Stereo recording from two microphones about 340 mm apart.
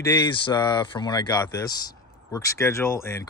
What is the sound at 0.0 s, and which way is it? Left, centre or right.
Speech, centre.